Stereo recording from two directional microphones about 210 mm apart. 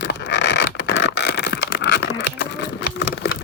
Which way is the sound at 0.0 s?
55° left (ahead or behind).